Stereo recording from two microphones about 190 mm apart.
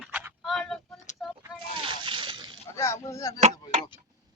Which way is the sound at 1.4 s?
25° right (ahead or behind).